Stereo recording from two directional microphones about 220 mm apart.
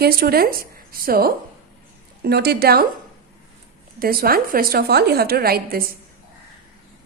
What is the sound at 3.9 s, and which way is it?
A woman's voice, 40° right (ahead or behind).